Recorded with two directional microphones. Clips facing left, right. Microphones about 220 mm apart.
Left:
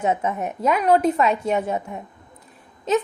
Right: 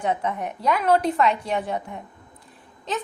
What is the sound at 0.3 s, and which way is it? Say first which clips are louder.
Speech: left 2 dB; 25° left (ahead or behind).